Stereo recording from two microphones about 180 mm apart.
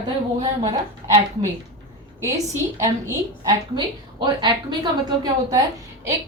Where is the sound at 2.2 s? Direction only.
15° right (ahead or behind).